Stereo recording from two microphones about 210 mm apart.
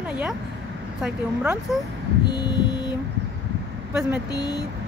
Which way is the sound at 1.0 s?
5° right (ahead or behind).